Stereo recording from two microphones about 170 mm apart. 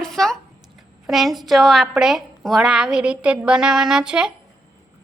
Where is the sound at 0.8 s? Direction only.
Centre (ahead or behind).